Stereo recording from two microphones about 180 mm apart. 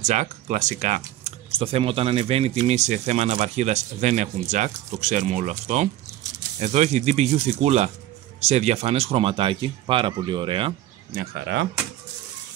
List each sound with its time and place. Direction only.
0.0 s speech: 45° right (ahead or behind)
11.1 s speech: 60° right (ahead or behind)